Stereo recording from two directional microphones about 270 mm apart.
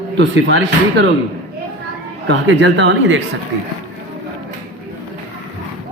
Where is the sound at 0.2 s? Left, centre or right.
Right.